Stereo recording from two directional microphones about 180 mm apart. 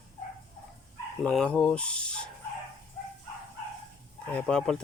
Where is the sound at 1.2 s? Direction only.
5° left (ahead or behind).